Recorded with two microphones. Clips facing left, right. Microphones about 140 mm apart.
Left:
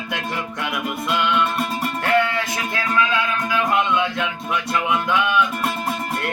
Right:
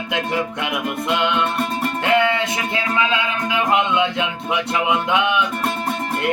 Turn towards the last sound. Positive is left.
turn(degrees=-20)  # may be behind; listen again after turning